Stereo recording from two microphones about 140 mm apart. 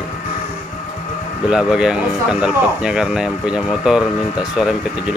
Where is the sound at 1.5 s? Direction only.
5° right (ahead or behind).